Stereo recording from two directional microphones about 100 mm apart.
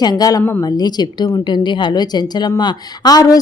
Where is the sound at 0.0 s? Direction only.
40° left (ahead or behind).